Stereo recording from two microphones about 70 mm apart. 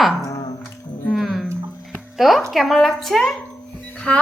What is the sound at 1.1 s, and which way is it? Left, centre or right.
Music, centre.